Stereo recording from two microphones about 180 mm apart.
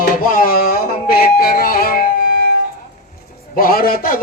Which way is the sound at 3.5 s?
55° left (ahead or behind).